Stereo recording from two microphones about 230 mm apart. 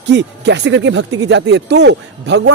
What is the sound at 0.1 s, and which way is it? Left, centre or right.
A man's voice, right.